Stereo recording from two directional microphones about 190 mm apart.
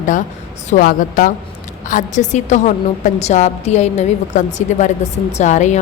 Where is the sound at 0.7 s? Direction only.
45° left (ahead or behind).